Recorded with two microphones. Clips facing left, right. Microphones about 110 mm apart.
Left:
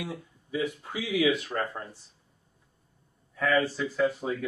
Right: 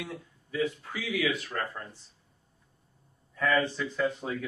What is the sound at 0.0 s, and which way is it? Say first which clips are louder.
Speech: left 3 dB; 15° left (ahead or behind).